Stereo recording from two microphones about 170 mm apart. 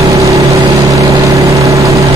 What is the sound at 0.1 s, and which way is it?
Vehicle, 20° right (ahead or behind).